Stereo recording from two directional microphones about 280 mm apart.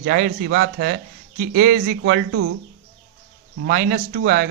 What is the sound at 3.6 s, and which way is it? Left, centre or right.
Speech, right.